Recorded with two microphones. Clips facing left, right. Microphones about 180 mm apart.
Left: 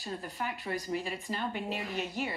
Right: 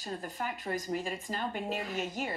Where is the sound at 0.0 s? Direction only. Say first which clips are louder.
Even; 45° right (ahead or behind).